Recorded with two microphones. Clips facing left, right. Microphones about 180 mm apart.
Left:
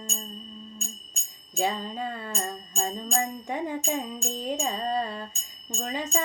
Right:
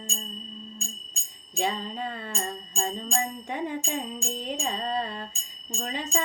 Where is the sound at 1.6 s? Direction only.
40° left (ahead or behind).